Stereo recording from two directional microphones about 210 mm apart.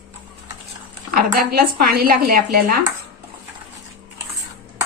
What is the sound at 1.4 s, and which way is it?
Speech, 45° right (ahead or behind).